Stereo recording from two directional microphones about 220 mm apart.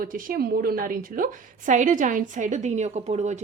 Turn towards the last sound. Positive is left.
turn(degrees=-30)  # may be behind; listen again after turning